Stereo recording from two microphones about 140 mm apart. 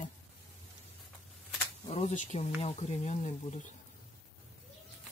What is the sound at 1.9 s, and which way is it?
Speech, 45° left (ahead or behind).